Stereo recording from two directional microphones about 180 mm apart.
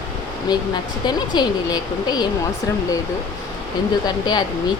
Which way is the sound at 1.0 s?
25° left (ahead or behind).